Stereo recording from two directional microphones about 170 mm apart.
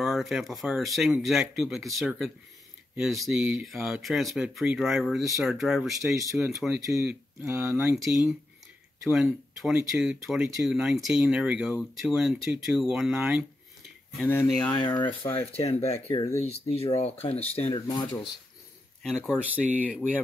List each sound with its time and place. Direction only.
0.0 s speech: centre (ahead or behind)
14.1 s speech: 10° left (ahead or behind)
14.8 s speech: 25° left (ahead or behind)
15.5 s speech: 35° left (ahead or behind)
17.8 s speech: 25° left (ahead or behind)
19.0 s speech: centre (ahead or behind)